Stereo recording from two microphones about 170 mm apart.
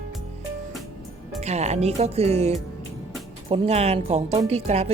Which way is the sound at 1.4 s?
40° right (ahead or behind).